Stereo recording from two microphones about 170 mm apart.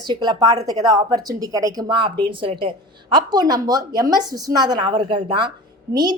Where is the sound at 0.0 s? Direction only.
25° right (ahead or behind).